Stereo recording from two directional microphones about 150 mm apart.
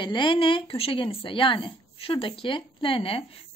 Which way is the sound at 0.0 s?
30° left (ahead or behind).